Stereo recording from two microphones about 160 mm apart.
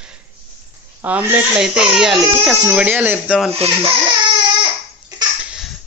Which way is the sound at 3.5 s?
40° right (ahead or behind).